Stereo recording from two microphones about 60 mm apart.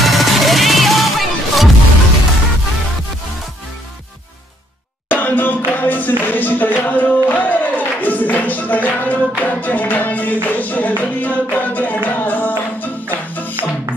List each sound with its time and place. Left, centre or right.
0.0 s music: centre
5.1 s music: left